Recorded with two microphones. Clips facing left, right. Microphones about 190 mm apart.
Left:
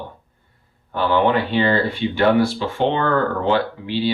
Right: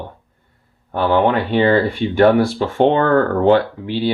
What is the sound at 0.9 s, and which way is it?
Speech, 50° right (ahead or behind).